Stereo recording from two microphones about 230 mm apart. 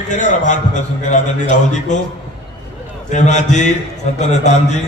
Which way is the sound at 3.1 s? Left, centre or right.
Left.